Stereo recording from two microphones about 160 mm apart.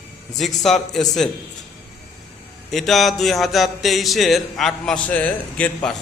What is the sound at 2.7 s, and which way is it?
Speech, centre (ahead or behind).